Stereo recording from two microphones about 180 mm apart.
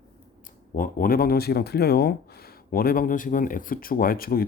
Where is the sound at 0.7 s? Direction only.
50° left (ahead or behind).